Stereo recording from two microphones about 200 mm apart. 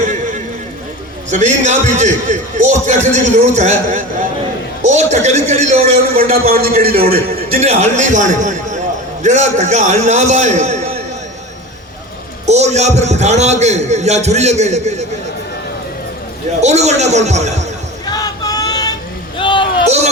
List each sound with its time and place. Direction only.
0.0 s a sound: 40° right (ahead or behind)
1.3 s a man's voice: 35° right (ahead or behind)
6.7 s a man's voice: 50° right (ahead or behind)
7.6 s a man's voice: 35° right (ahead or behind)
12.5 s a man's voice: 35° right (ahead or behind)
16.6 s a man's voice: 35° right (ahead or behind)
18.0 s a sound: 20° left (ahead or behind)